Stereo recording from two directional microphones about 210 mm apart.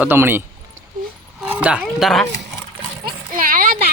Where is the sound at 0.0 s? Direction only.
10° right (ahead or behind).